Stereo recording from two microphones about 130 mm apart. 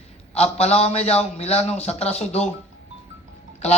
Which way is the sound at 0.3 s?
55° left (ahead or behind).